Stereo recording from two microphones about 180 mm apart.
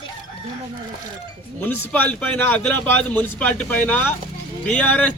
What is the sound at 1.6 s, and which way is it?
A man's voice, 10° left (ahead or behind).